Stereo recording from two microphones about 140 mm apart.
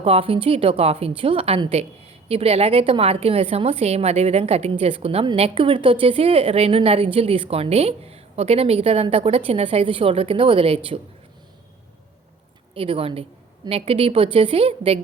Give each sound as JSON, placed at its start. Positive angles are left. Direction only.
{"t": 0.0, "sound": "a woman's voice", "side_deg": -40}
{"t": 12.7, "sound": "a woman's voice", "side_deg": -40}